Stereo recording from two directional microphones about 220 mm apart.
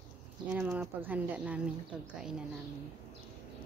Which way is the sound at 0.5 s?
10° right (ahead or behind).